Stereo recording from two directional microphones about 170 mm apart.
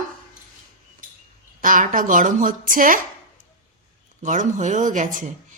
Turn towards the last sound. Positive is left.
turn(degrees=-50)  # may be behind; listen again after turning